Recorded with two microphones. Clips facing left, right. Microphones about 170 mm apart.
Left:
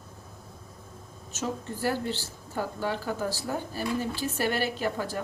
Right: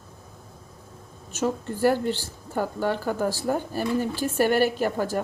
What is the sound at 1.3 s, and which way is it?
A woman's voice, 55° right (ahead or behind).